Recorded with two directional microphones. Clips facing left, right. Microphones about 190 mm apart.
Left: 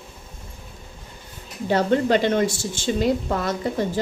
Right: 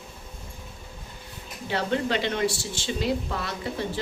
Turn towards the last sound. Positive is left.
turn(degrees=45)  # may be behind; listen again after turning